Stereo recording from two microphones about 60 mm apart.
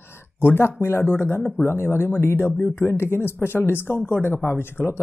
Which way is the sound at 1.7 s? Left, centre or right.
Left.